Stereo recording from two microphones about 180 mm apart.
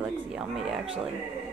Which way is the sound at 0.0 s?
5° right (ahead or behind).